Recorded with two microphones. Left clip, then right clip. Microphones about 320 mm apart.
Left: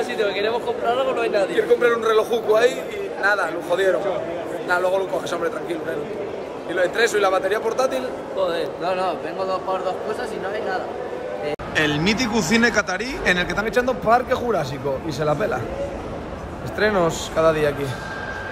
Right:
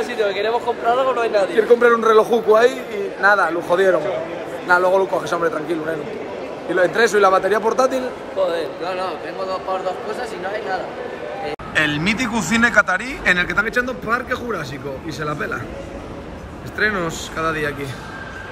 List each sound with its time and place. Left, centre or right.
0.0 s speech: centre
8.4 s a man's voice: centre
11.7 s speech: centre
16.7 s speech: centre